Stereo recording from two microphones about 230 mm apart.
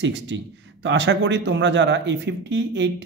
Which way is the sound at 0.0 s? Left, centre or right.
Right.